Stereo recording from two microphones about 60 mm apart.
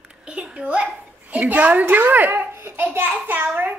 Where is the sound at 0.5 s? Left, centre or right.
Right.